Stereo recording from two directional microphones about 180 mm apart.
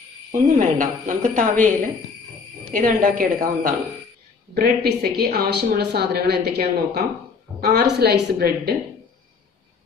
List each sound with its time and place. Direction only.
0.3 s a woman's voice: 45° right (ahead or behind)
2.7 s a woman's voice: 50° right (ahead or behind)
4.6 s a woman's voice: 60° right (ahead or behind)